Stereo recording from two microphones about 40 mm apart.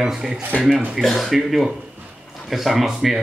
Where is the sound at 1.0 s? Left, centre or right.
Centre.